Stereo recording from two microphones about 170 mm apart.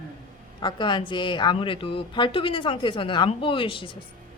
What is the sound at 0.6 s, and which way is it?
A woman's voice, 30° left (ahead or behind).